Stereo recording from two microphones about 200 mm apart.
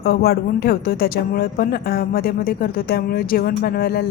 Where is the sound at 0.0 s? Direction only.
50° left (ahead or behind).